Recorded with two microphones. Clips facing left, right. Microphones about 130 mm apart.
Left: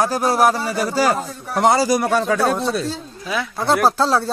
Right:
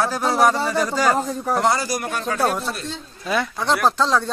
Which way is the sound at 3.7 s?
40° left (ahead or behind).